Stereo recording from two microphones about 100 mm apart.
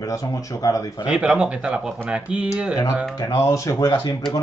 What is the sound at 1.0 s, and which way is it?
Speech, 10° right (ahead or behind).